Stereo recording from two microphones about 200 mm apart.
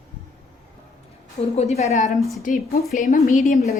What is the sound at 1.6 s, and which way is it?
A woman's voice, 30° left (ahead or behind).